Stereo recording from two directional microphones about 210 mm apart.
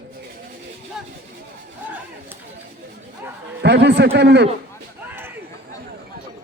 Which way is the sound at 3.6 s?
55° right (ahead or behind).